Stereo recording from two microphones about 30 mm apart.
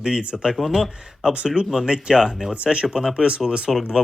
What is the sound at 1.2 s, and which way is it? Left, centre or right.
Speech, right.